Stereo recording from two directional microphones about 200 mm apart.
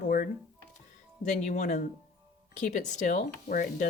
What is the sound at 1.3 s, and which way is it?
Speech, 35° left (ahead or behind).